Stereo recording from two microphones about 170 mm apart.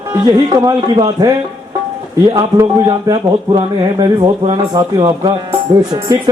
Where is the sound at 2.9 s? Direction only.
30° right (ahead or behind).